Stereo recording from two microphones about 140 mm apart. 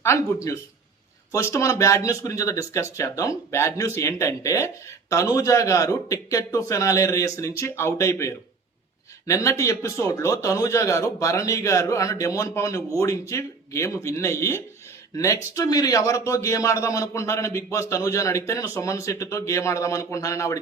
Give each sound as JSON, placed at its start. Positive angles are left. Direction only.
{"t": 0.0, "sound": "speech", "side_deg": 20}